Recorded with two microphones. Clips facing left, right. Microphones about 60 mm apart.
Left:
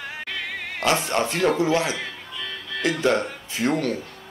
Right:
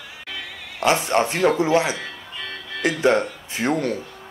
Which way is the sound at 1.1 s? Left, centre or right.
Right.